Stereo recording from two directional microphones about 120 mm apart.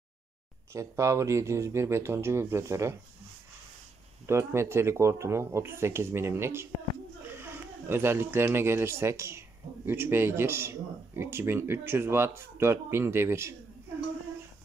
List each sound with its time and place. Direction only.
0.7 s speech: 25° right (ahead or behind)
4.3 s speech: 20° right (ahead or behind)